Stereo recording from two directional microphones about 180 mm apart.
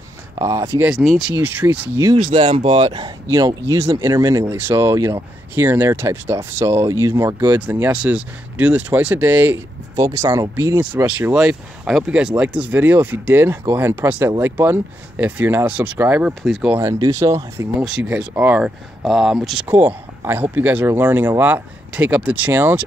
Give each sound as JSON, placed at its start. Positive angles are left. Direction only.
{"t": 0.4, "sound": "speech", "side_deg": -15}
{"t": 0.8, "sound": "speech", "side_deg": 0}
{"t": 2.3, "sound": "speech", "side_deg": -35}
{"t": 16.7, "sound": "speech", "side_deg": -20}